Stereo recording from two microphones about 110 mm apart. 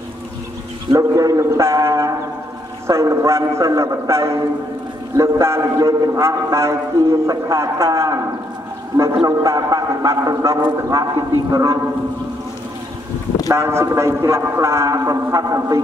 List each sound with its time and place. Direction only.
0.9 s a man's voice: 30° right (ahead or behind)
9.4 s a man's voice: 30° right (ahead or behind)
13.5 s a man's voice: 25° right (ahead or behind)